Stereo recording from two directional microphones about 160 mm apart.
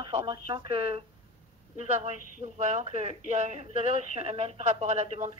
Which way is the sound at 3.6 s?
50° left (ahead or behind).